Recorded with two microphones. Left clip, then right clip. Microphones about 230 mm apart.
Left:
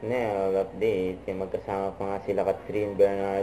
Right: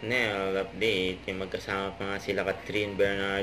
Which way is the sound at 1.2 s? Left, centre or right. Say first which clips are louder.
Left 3 dB; right.